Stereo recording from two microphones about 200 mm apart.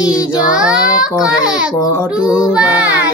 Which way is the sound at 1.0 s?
20° left (ahead or behind).